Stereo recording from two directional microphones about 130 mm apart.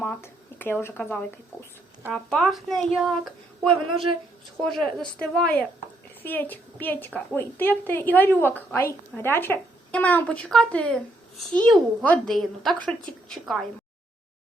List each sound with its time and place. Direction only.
0.0 s speech: 15° left (ahead or behind)
2.1 s a woman's voice: 5° left (ahead or behind)